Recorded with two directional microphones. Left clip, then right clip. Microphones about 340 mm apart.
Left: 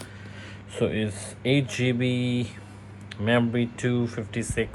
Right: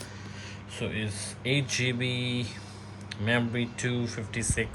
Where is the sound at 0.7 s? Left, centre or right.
Centre.